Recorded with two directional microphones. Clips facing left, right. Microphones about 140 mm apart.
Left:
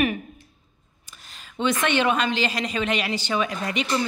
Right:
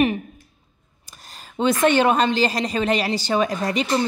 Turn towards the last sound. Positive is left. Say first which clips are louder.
# right 4 dB
turn(degrees=-35)  # may be behind; listen again after turning